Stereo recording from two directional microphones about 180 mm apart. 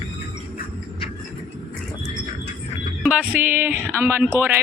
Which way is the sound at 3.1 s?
10° right (ahead or behind).